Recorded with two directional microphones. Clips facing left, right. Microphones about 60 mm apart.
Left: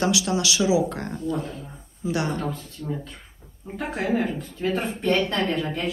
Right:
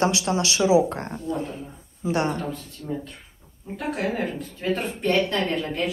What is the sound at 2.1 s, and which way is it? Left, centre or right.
Speech, right.